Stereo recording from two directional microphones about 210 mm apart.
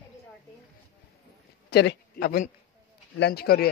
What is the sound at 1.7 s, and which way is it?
A man's voice, 50° left (ahead or behind).